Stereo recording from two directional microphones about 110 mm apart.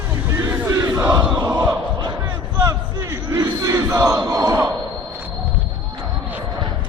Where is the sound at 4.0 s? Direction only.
35° right (ahead or behind).